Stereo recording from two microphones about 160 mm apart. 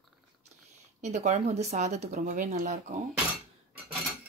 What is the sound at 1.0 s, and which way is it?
Speech, 45° right (ahead or behind).